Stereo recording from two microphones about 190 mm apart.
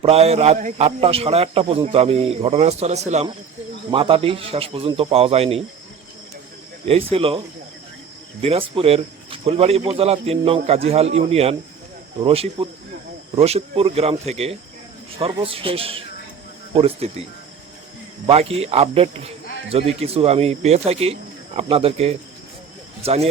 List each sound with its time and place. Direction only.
0.0 s a man's voice: 30° right (ahead or behind)
7.1 s a man's voice: 30° right (ahead or behind)
18.3 s a man's voice: 30° right (ahead or behind)